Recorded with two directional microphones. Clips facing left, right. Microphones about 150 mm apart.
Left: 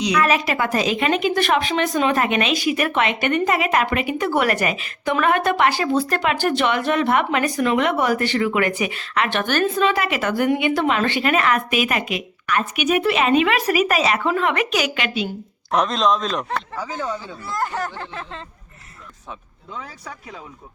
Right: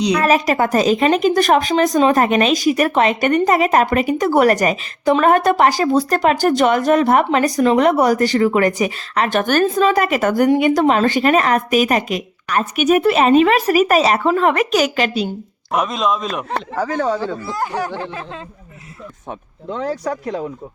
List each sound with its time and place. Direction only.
0.0 s speech: 35° right (ahead or behind)
15.7 s speech: 5° right (ahead or behind)
16.7 s speech: 65° right (ahead or behind); by 17.5 s 90° right
17.6 s speech: 10° right (ahead or behind)
19.3 s speech: 70° right (ahead or behind)